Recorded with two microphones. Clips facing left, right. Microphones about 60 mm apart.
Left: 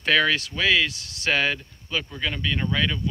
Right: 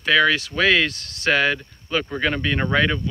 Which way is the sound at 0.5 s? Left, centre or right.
Right.